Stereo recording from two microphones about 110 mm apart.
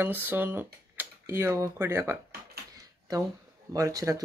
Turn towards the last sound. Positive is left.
turn(degrees=-30)  # may be behind; listen again after turning